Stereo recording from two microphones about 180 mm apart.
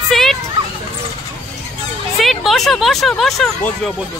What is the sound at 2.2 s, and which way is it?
Speech, centre (ahead or behind).